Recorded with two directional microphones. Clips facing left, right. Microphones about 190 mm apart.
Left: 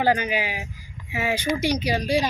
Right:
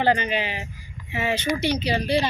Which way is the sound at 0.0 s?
5° left (ahead or behind).